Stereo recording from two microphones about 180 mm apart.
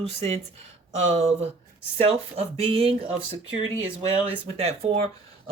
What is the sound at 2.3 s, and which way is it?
Speech, 35° right (ahead or behind).